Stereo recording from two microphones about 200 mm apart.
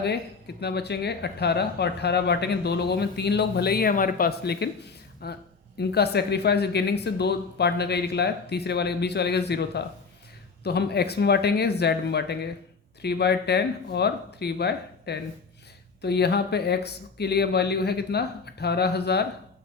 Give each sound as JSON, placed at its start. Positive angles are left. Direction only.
{"t": 0.0, "sound": "speech", "side_deg": 55}